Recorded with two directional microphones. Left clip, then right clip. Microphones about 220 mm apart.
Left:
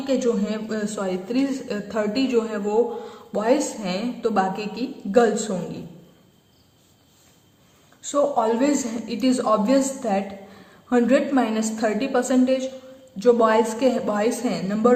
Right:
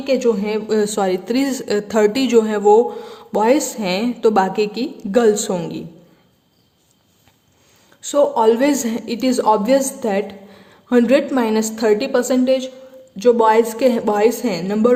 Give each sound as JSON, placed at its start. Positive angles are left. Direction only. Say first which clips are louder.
{"t": 0.0, "sound": "speech", "louder": "right 6 dB", "side_deg": -40}
{"t": 8.0, "sound": "a woman's voice", "louder": "right 6 dB", "side_deg": -40}